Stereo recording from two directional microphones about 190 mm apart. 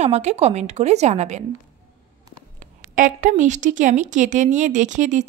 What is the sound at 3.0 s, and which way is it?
A woman's voice, 45° right (ahead or behind).